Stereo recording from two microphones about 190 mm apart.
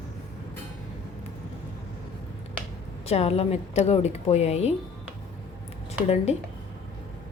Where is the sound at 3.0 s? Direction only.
35° left (ahead or behind).